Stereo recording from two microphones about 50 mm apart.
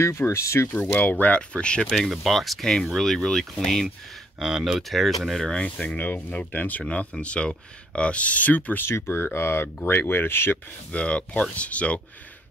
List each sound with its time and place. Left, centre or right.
0.2 s speech: left
0.7 s speech: left
1.9 s speech: centre
4.4 s speech: centre
4.8 s speech: centre
5.6 s speech: left
5.9 s speech: left
8.8 s speech: left
10.9 s speech: left